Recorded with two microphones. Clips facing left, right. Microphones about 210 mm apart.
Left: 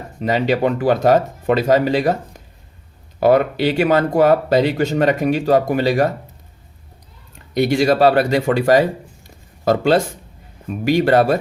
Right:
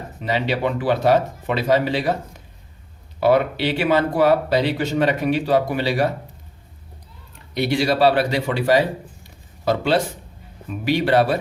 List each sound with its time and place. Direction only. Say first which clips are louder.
0.2 s speech: left 5 dB; 45° left (ahead or behind)
3.2 s speech: left 3 dB; 45° left (ahead or behind)
7.5 s speech: left 5 dB; 45° left (ahead or behind)
9.2 s a sound: left 4 dB; 45° left (ahead or behind)
10.7 s speech: left 4 dB; 45° left (ahead or behind)